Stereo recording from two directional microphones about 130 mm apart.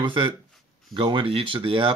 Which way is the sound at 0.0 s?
40° right (ahead or behind).